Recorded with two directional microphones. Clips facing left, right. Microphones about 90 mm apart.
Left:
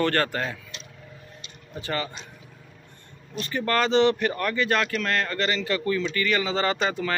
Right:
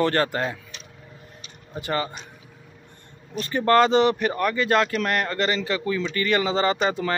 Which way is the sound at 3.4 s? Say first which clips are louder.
Right 6 dB; 30° right (ahead or behind).